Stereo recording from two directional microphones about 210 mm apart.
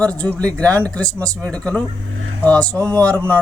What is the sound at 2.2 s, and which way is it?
Vehicle, 90° right.